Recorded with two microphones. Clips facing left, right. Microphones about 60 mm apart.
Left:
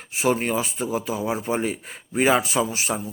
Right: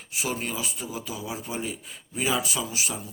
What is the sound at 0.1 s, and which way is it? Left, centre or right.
Speech, left.